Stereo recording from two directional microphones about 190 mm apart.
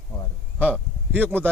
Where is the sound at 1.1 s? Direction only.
10° right (ahead or behind).